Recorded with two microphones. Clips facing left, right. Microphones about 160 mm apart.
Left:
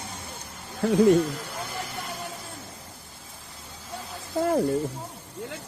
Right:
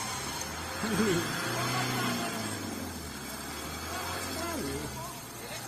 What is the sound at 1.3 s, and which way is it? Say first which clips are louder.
Vehicle: right 1 dB; 90° right.